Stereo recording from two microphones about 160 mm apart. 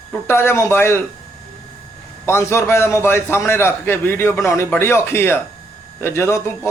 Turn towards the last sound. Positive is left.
turn(degrees=15)  # may be behind; listen again after turning